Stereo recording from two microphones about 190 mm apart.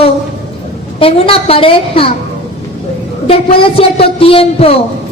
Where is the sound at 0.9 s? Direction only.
30° left (ahead or behind).